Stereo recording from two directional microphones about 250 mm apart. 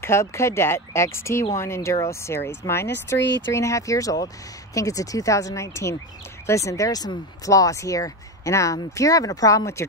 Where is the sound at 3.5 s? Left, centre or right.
Centre.